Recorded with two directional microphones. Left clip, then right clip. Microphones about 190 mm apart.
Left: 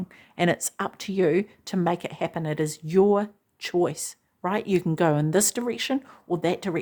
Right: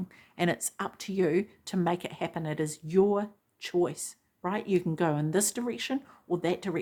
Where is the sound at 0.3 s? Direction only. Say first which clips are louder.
Left 6 dB; 30° left (ahead or behind).